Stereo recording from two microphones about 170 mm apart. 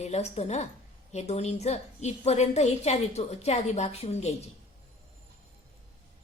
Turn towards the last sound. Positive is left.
turn(degrees=40)  # may be behind; listen again after turning